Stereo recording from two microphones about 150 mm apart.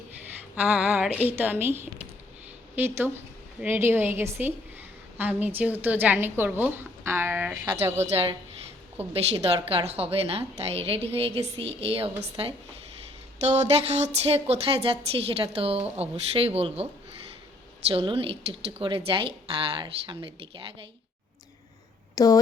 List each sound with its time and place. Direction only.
0.5 s a woman's voice: 10° right (ahead or behind)
8.0 s a woman's voice: 40° right (ahead or behind)
17.9 s a woman's voice: 35° right (ahead or behind)
22.1 s speech: 25° left (ahead or behind)